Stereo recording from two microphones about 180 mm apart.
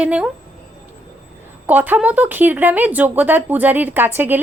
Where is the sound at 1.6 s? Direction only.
10° right (ahead or behind).